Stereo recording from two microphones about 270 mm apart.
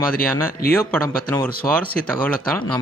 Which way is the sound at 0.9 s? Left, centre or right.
Centre.